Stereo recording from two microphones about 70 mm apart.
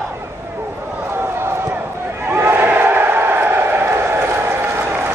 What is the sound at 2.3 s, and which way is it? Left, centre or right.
Crowd, right.